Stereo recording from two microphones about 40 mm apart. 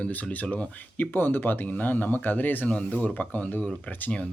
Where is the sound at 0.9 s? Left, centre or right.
Left.